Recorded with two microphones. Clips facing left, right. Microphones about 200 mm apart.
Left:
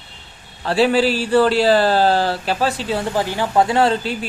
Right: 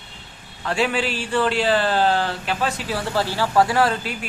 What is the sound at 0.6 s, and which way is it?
Speech, 35° left (ahead or behind).